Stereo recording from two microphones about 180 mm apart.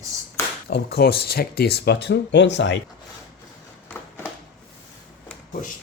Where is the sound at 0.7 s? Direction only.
60° left (ahead or behind); by 2.8 s 75° left (ahead or behind).